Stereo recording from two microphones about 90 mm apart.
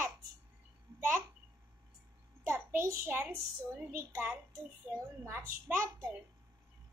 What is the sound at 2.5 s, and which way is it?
A child's voice, 30° right (ahead or behind).